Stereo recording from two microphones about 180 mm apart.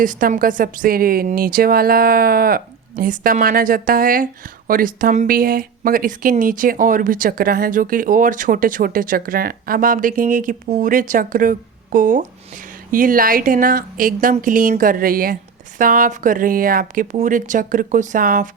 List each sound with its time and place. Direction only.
0.0 s speech: 50° right (ahead or behind)